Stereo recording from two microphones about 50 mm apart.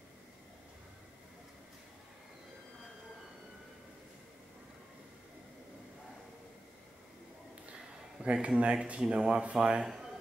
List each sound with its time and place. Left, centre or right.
8.2 s speech: right